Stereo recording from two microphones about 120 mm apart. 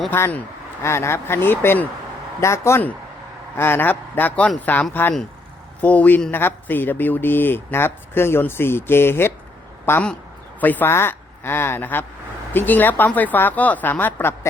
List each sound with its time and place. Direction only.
0.1 s a man's voice: 15° left (ahead or behind)
10.6 s a man's voice: 15° left (ahead or behind)